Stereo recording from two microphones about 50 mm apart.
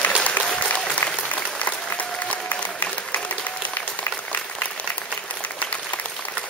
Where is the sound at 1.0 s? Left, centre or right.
Left.